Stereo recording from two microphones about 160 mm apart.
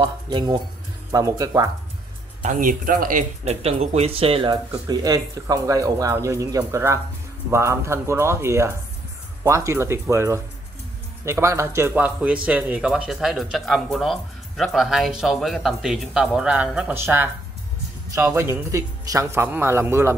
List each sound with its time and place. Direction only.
0.0 s speech: 25° right (ahead or behind)
2.4 s speech: 55° right (ahead or behind)
3.4 s a man's voice: 40° right (ahead or behind); by 20.2 s 15° right (ahead or behind)